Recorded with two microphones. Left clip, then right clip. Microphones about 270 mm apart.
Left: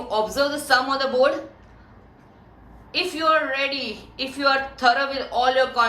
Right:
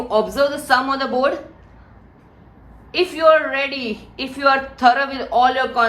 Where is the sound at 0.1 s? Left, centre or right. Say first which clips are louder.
Right 4 dB; right.